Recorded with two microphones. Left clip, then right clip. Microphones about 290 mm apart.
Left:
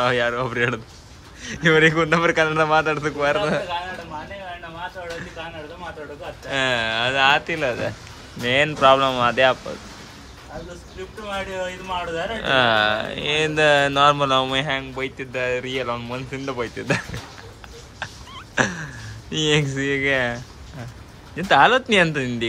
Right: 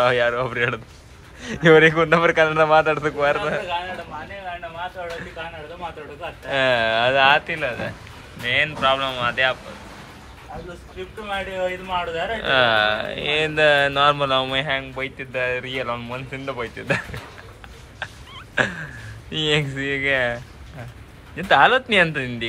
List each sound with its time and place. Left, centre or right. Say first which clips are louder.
0.0 s speech: right 2 dB; centre
6.5 s speech: right 3 dB; centre
12.4 s speech: even; centre
17.9 s fowl: even; centre
19.3 s speech: left 1 dB; centre
21.4 s speech: even; centre